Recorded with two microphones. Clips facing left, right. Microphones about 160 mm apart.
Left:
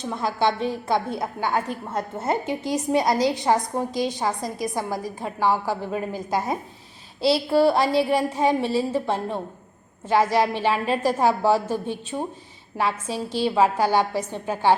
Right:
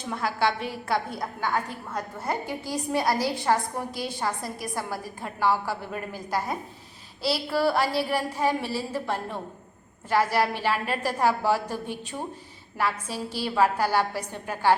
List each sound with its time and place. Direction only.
0.1 s a woman's voice: 20° left (ahead or behind)